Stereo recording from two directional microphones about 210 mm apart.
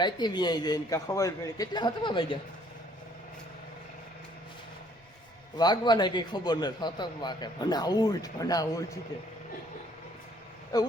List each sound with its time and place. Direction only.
0.0 s a man's voice: 20° left (ahead or behind)
5.5 s a man's voice: 20° left (ahead or behind)
10.7 s speech: 15° left (ahead or behind)